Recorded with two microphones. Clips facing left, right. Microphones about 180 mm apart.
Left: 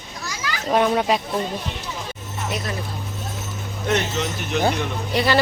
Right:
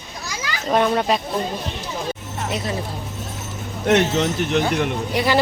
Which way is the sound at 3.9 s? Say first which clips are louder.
Right 6 dB; 70° right (ahead or behind).